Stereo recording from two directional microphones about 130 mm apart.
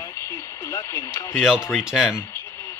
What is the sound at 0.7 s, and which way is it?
Radio, 20° left (ahead or behind).